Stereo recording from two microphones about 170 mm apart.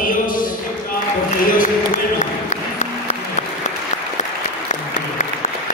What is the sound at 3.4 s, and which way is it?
Applause, 45° left (ahead or behind).